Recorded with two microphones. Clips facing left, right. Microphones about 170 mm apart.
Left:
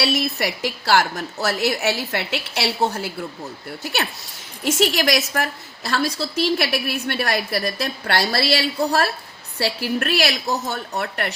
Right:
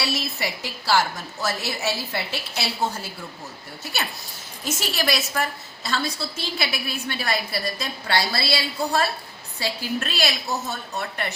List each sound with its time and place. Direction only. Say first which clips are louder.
0.0 s a woman's voice: left 6 dB; 70° left (ahead or behind)
4.6 s a woman's voice: left 7 dB; 75° left (ahead or behind)